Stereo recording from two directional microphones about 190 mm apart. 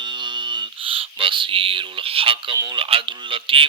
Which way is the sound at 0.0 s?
25° right (ahead or behind).